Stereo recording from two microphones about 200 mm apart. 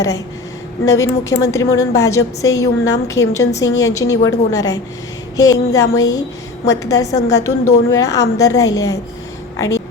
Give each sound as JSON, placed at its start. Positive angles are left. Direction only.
{"t": 0.9, "sound": "a woman's voice", "side_deg": 15}